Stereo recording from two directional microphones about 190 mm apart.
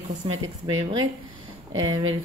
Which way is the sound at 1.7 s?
90° right.